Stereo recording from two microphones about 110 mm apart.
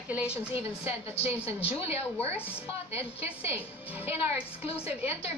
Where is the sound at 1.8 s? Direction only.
25° right (ahead or behind).